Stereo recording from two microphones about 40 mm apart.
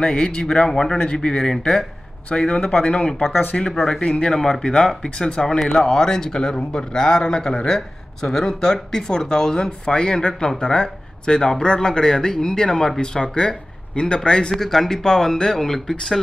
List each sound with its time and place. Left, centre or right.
0.0 s speech: left
3.5 s speech: centre
4.0 s speech: left
4.3 s speech: centre
14.5 s speech: centre